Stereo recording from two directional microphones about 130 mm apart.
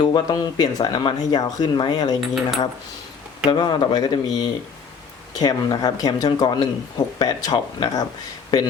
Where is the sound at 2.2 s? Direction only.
Centre (ahead or behind).